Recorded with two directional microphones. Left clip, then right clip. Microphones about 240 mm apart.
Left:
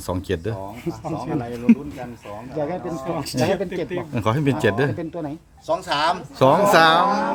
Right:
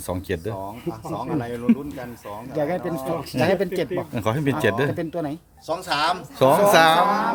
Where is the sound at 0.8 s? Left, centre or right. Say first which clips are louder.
Left 2 dB; left.